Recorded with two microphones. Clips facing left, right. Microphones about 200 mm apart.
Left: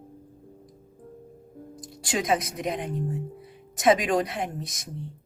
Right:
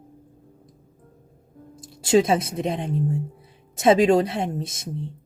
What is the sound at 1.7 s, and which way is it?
Speech, 25° right (ahead or behind).